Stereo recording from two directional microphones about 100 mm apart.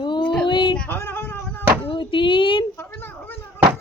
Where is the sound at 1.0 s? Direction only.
20° left (ahead or behind).